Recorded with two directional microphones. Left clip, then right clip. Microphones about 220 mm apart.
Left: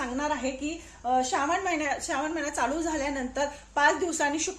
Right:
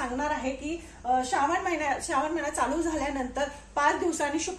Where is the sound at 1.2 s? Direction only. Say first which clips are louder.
Even; 45° left (ahead or behind).